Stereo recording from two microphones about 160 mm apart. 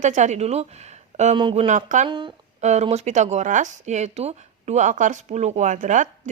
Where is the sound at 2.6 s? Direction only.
45° right (ahead or behind).